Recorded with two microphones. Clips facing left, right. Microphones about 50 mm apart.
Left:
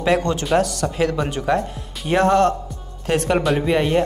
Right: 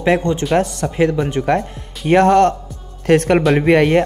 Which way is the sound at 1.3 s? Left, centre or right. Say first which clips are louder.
Right 3 dB; right.